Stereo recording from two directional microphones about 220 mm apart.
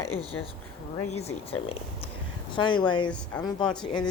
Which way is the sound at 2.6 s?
20° left (ahead or behind).